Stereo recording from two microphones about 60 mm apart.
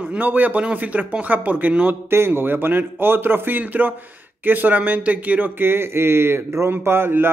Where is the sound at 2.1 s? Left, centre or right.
Right.